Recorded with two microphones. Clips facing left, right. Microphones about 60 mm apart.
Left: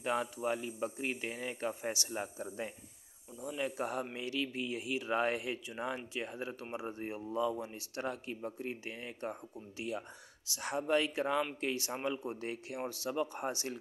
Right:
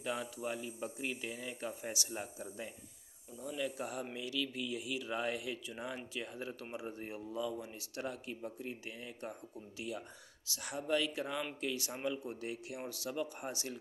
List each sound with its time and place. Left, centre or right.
0.0 s speech: left